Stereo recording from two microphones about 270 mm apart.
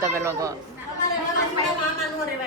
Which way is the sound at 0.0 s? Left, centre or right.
Centre.